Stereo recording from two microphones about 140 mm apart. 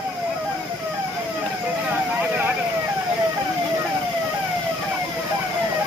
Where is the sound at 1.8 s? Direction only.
10° right (ahead or behind).